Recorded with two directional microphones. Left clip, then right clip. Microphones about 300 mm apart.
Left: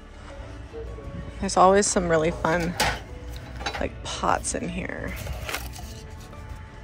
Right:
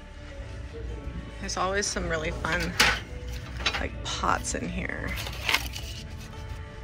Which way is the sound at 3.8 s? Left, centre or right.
Centre.